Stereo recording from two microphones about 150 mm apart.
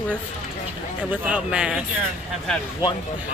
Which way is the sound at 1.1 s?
10° right (ahead or behind).